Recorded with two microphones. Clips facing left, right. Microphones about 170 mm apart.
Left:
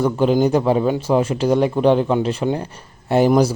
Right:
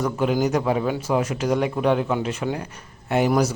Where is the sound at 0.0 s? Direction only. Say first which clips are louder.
Left 5 dB; 30° left (ahead or behind).